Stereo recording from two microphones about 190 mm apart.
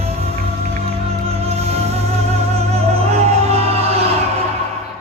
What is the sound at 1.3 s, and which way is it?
Music, 35° right (ahead or behind).